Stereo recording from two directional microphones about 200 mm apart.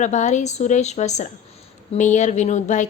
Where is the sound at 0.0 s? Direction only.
35° left (ahead or behind).